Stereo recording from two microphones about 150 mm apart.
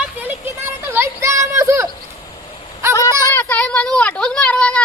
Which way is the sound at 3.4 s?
10° left (ahead or behind).